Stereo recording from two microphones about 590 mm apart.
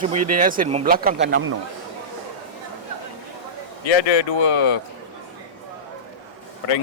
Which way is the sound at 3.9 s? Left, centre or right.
Left.